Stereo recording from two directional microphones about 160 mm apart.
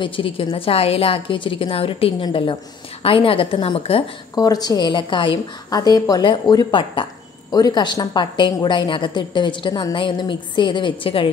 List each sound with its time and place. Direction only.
0.0 s a woman's voice: 35° left (ahead or behind)
4.4 s a woman's voice: 25° left (ahead or behind)